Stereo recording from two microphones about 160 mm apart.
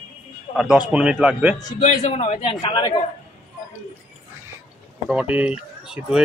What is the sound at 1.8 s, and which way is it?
Speech, 50° left (ahead or behind).